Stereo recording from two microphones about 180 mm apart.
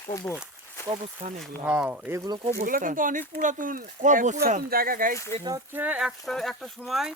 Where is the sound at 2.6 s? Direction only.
50° right (ahead or behind).